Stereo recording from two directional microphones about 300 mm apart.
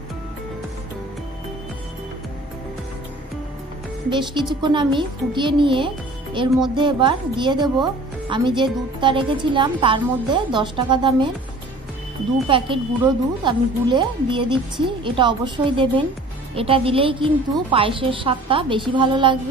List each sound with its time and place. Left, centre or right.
4.1 s speech: centre
12.4 s speech: centre